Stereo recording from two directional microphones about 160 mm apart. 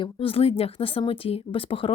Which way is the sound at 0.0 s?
35° left (ahead or behind).